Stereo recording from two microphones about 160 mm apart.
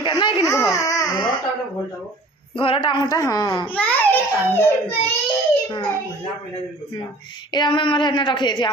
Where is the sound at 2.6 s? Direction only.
30° left (ahead or behind).